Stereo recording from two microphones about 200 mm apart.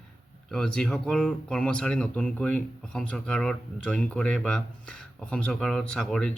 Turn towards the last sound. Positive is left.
turn(degrees=5)  # may be behind; listen again after turning